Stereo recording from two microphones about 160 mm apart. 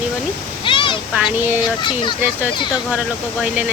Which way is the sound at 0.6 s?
30° left (ahead or behind).